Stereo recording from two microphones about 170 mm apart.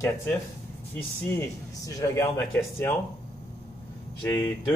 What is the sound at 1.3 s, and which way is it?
Speech, 15° left (ahead or behind).